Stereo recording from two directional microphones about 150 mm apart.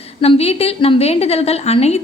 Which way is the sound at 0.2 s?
45° left (ahead or behind).